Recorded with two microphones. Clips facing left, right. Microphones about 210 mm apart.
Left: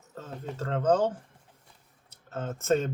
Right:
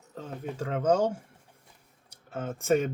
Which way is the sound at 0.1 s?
15° right (ahead or behind).